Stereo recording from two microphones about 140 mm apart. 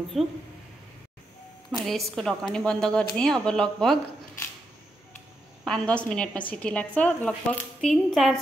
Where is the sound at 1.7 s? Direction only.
Centre (ahead or behind).